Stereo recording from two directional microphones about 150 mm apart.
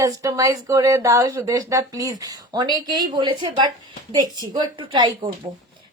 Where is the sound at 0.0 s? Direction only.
20° right (ahead or behind).